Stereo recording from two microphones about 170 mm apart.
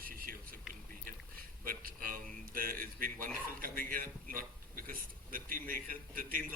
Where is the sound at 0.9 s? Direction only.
55° right (ahead or behind).